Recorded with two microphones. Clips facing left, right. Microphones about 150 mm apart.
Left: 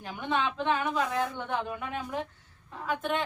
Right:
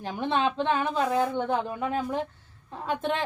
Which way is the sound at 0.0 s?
30° right (ahead or behind).